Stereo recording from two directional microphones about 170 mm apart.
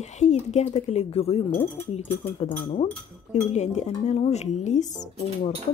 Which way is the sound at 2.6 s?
50° left (ahead or behind).